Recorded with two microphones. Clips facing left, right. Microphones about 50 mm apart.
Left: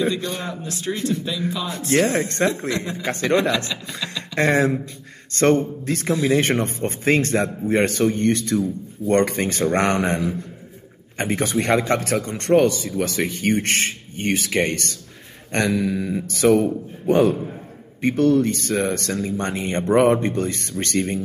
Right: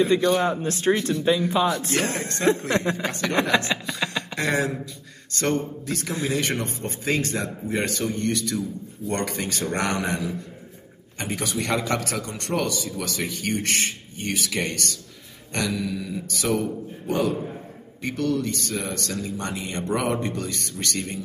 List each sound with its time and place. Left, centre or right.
0.1 s a man's voice: right
1.9 s a man's voice: left
2.7 s a man's voice: right
4.4 s a man's voice: left